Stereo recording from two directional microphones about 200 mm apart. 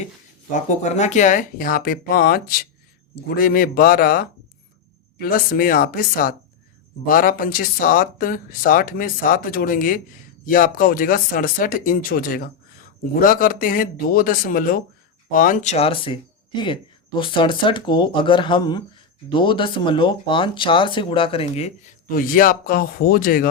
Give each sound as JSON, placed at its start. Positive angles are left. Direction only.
{"t": 0.5, "sound": "speech", "side_deg": 35}
{"t": 22.1, "sound": "speech", "side_deg": 45}